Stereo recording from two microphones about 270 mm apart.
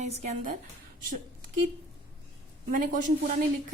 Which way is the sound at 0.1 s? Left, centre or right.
Right.